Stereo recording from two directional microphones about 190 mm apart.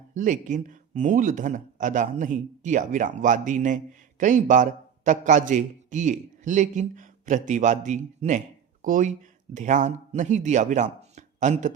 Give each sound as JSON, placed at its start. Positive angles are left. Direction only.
{"t": 0.1, "sound": "a man's voice", "side_deg": -40}